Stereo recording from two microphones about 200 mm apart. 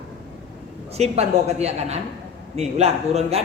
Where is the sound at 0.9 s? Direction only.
30° right (ahead or behind).